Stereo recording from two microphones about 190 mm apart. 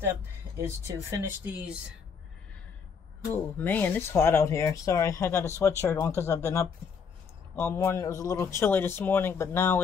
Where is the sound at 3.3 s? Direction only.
10° left (ahead or behind).